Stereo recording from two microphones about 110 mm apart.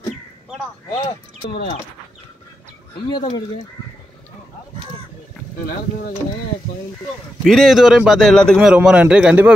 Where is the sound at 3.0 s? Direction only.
40° left (ahead or behind).